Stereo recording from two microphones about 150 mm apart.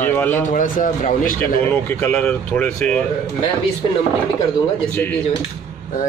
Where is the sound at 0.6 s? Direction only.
60° left (ahead or behind).